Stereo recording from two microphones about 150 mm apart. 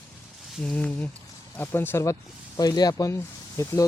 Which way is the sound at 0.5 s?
5° left (ahead or behind).